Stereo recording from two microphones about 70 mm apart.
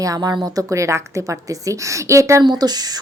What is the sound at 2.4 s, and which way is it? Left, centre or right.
Speech, right.